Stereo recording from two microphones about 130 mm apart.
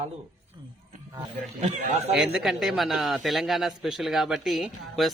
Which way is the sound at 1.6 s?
60° right (ahead or behind).